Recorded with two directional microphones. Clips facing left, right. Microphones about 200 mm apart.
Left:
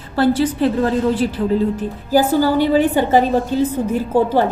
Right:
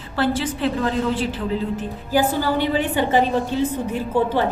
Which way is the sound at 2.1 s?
40° left (ahead or behind).